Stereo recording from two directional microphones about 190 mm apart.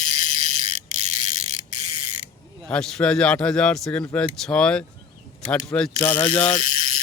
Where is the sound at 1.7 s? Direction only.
30° right (ahead or behind).